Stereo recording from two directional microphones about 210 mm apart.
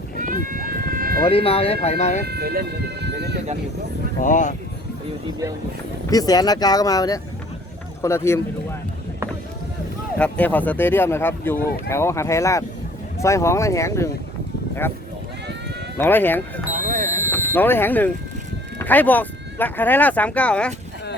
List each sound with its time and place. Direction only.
0.2 s run: 40° right (ahead or behind)
1.3 s speech: 25° left (ahead or behind)
2.2 s speech: 50° right (ahead or behind)
4.2 s speech: 35° left (ahead or behind)
6.1 s speech: 20° left (ahead or behind)
10.2 s speech: 5° left (ahead or behind)
16.0 s speech: 10° left (ahead or behind)
16.8 s a sound: 35° right (ahead or behind)
17.3 s speech: 10° left (ahead or behind)